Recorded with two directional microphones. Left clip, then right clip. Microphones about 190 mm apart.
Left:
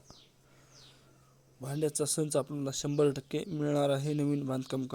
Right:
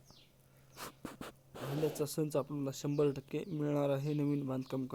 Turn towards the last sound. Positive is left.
turn(degrees=20)  # may be behind; listen again after turning